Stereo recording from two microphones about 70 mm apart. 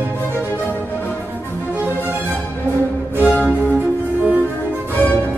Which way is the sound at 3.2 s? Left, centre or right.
Left.